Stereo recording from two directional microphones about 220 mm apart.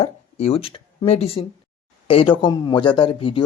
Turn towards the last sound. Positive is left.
turn(degrees=25)  # may be behind; listen again after turning